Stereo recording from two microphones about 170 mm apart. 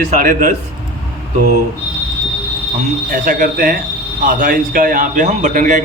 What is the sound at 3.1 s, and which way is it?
A man's voice, 55° right (ahead or behind).